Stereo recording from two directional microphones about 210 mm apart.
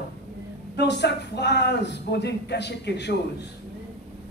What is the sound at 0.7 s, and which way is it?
A man's voice, 55° left (ahead or behind).